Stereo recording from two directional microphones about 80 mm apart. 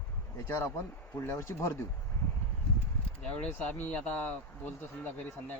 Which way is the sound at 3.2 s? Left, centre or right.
Centre.